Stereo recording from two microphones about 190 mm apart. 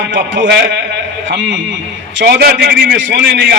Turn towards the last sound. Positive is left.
turn(degrees=-65)  # may be behind; listen again after turning